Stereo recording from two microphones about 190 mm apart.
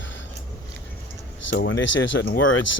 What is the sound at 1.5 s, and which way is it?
Speech, 70° left (ahead or behind).